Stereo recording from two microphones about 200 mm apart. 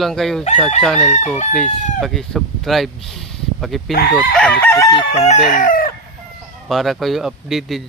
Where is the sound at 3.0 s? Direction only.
Centre (ahead or behind).